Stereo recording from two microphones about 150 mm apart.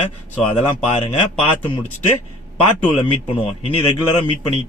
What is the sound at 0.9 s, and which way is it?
Speech, 40° left (ahead or behind).